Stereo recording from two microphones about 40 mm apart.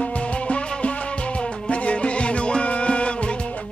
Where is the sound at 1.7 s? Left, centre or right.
Left.